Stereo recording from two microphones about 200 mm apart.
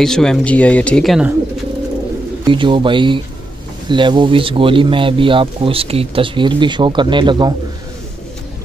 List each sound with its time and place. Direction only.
0.0 s speech: 5° left (ahead or behind)
2.4 s speech: 25° right (ahead or behind)